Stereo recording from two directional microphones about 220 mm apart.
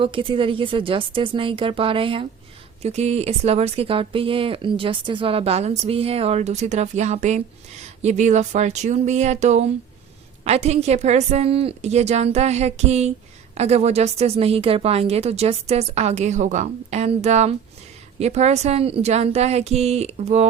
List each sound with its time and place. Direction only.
0.0 s speech: 25° right (ahead or behind)